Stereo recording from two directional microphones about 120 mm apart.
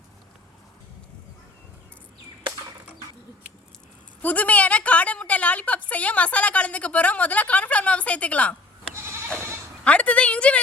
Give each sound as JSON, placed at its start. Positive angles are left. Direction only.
{"t": 4.2, "sound": "a sound", "side_deg": 10}
{"t": 5.9, "sound": "a woman's voice", "side_deg": 10}
{"t": 9.0, "sound": "goat", "side_deg": -20}
{"t": 9.8, "sound": "a woman's voice", "side_deg": 10}